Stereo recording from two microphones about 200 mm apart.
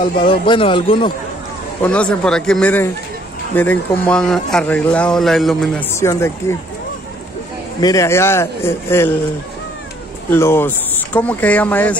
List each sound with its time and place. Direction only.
0.3 s speech: 25° left (ahead or behind)
1.9 s speech: 5° left (ahead or behind)
7.8 s a man's voice: 15° left (ahead or behind)
10.3 s a man's voice: 10° left (ahead or behind)